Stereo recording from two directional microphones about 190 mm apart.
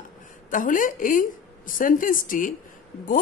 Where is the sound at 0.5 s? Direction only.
45° left (ahead or behind).